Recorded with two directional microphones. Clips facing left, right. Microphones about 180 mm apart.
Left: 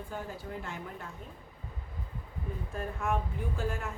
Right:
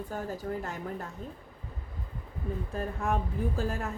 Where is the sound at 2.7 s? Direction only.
35° right (ahead or behind).